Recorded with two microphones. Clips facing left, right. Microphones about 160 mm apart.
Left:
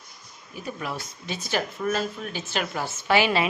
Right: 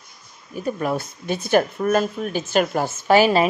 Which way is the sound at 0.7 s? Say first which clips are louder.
Right 9 dB; 45° right (ahead or behind).